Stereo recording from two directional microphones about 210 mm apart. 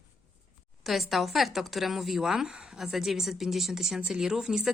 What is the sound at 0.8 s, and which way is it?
Speech, centre (ahead or behind).